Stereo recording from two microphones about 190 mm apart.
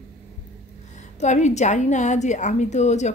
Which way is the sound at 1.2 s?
40° left (ahead or behind).